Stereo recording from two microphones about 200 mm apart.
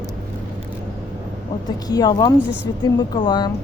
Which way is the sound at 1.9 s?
20° left (ahead or behind).